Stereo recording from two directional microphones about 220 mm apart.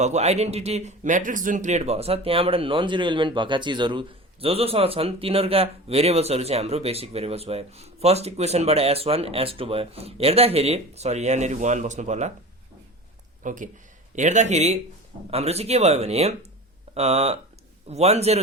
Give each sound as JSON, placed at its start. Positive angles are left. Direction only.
{"t": 0.0, "sound": "speech", "side_deg": -30}
{"t": 13.4, "sound": "speech", "side_deg": -35}